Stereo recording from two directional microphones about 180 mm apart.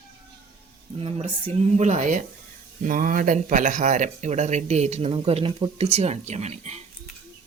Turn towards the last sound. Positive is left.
turn(degrees=-40)  # may be behind; listen again after turning